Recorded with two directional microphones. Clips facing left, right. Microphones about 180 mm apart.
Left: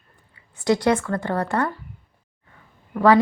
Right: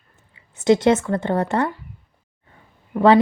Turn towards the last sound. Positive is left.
turn(degrees=-25)  # may be behind; listen again after turning